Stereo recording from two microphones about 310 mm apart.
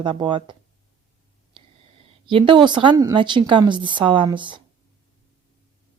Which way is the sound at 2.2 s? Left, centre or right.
Centre.